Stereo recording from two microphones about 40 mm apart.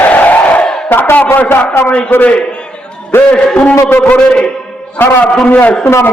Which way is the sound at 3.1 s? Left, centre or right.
Left.